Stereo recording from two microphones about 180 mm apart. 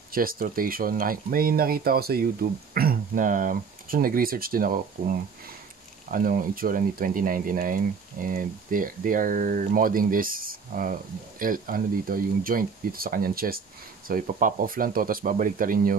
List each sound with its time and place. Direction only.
0.1 s speech: 55° right (ahead or behind)